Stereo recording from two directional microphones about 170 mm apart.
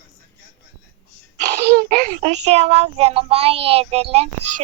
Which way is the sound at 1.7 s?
55° right (ahead or behind).